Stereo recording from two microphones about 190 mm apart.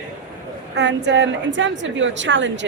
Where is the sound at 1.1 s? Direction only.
70° right (ahead or behind).